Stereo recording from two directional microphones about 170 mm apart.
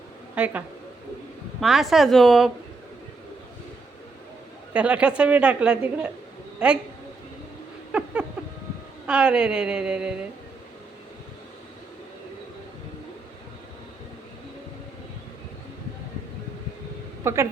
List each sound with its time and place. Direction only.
0.3 s speech: 10° right (ahead or behind)
1.6 s a woman's voice: centre (ahead or behind)
4.7 s a woman's voice: 5° right (ahead or behind)
7.9 s a sound: 5° right (ahead or behind)
9.0 s a woman's voice: 5° right (ahead or behind)
17.2 s a woman's voice: 15° right (ahead or behind)